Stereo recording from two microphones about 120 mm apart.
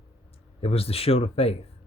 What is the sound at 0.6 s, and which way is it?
Speech, 55° left (ahead or behind).